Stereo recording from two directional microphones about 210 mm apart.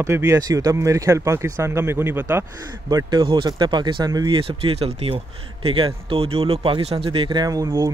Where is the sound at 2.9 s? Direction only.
20° right (ahead or behind).